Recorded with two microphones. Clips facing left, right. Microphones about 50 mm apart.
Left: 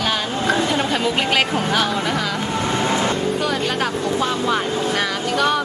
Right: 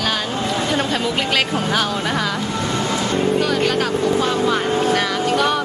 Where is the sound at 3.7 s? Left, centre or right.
Centre.